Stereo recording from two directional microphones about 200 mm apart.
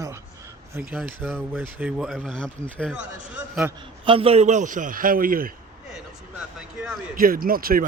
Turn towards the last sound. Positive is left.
turn(degrees=-45)  # may be behind; listen again after turning